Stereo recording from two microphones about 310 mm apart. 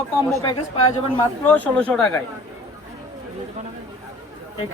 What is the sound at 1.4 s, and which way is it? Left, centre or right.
Speech, centre.